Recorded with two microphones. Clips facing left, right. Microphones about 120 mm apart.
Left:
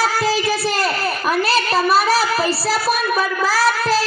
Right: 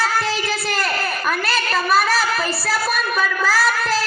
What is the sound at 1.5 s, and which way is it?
A child's voice, 30° left (ahead or behind).